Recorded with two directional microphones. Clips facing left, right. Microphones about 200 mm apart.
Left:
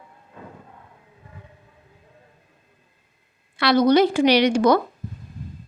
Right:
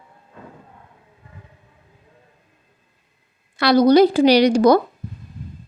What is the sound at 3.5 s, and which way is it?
A woman's voice, 40° right (ahead or behind).